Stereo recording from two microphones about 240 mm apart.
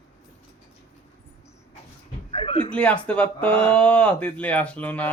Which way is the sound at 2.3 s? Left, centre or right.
Left.